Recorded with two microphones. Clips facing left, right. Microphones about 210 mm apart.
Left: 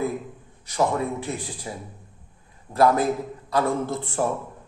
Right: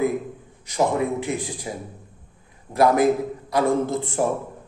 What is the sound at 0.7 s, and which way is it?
A man's voice, 15° right (ahead or behind).